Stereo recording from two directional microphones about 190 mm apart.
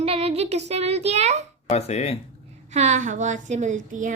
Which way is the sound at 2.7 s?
40° right (ahead or behind).